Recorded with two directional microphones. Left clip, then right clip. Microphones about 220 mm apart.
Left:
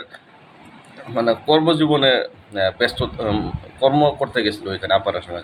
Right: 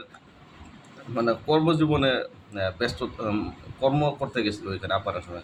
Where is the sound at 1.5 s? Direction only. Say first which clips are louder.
Left 7 dB; 10° right (ahead or behind).